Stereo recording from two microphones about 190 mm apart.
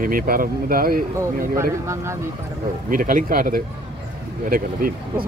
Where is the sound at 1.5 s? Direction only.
15° right (ahead or behind).